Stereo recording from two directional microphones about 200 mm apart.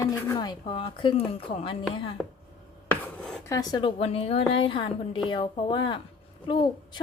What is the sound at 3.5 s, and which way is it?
A woman's voice, 20° left (ahead or behind).